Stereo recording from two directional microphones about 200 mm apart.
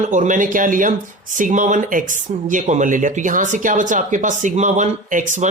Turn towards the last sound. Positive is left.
turn(degrees=-35)  # may be behind; listen again after turning